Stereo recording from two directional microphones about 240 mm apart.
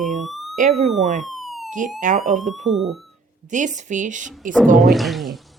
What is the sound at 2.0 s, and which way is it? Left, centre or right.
A woman's voice, right.